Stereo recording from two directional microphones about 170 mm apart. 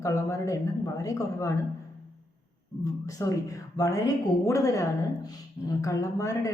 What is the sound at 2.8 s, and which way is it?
A woman's voice, 20° left (ahead or behind).